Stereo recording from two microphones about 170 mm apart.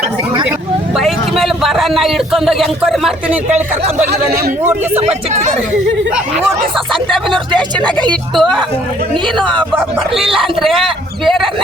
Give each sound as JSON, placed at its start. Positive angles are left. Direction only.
{"t": 0.9, "sound": "a man's voice", "side_deg": 0}
{"t": 3.5, "sound": "speech", "side_deg": -40}
{"t": 4.0, "sound": "speech", "side_deg": -65}
{"t": 4.9, "sound": "speech", "side_deg": -45}
{"t": 6.7, "sound": "speech", "side_deg": 0}
{"t": 10.2, "sound": "speech", "side_deg": -30}
{"t": 10.6, "sound": "speech", "side_deg": 0}